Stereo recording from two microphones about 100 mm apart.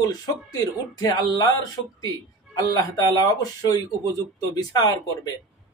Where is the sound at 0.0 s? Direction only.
40° left (ahead or behind).